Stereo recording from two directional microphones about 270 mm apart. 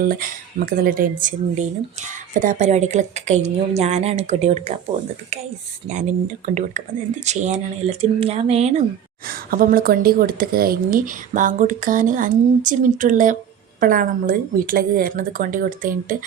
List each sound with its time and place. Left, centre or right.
0.1 s speech: right
5.9 s speech: right
9.2 s a woman's voice: right